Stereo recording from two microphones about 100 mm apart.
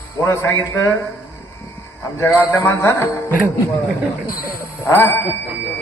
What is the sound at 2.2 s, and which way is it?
Speech, 20° left (ahead or behind).